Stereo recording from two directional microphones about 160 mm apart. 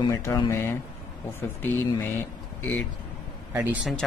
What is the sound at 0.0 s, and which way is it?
Speech, 20° left (ahead or behind).